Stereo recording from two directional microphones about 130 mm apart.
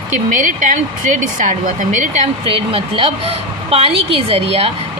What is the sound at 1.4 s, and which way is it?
Speech, 80° right.